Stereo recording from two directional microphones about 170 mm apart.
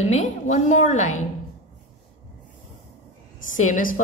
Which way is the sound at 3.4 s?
50° left (ahead or behind).